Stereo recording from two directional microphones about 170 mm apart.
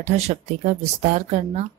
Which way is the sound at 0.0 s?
45° right (ahead or behind).